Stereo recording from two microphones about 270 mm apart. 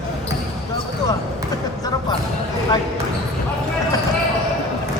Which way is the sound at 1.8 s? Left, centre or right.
Centre.